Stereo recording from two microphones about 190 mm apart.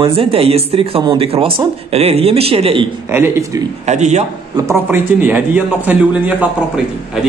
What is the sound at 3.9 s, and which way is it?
Speech, 35° right (ahead or behind).